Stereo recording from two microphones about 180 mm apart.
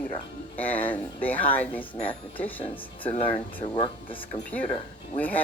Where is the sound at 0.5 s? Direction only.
10° left (ahead or behind).